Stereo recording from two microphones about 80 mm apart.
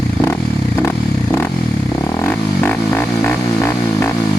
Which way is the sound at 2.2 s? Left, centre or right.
Left.